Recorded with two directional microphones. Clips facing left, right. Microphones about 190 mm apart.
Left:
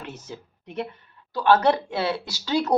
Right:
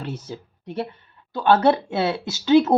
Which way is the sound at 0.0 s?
35° right (ahead or behind).